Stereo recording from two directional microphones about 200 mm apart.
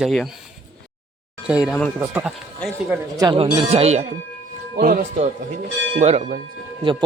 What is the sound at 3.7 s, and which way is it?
Speech, 30° right (ahead or behind).